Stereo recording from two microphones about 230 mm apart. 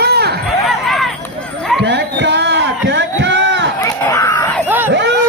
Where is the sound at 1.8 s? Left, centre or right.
Right.